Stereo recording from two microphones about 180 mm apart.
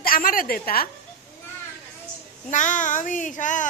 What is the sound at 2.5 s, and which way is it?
A child's voice, 45° left (ahead or behind).